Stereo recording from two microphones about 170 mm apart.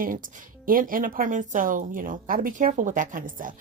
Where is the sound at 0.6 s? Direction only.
55° right (ahead or behind).